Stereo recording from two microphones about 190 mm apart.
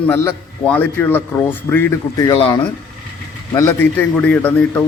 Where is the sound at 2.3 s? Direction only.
30° left (ahead or behind).